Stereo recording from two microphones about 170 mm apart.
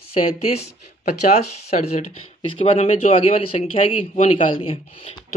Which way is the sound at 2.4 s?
35° left (ahead or behind).